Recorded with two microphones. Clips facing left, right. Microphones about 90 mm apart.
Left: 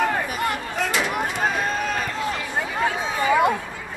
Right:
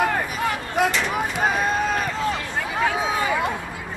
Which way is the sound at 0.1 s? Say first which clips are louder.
Even; centre (ahead or behind).